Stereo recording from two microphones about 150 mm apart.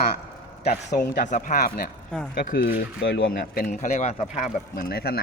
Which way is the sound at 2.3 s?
80° left.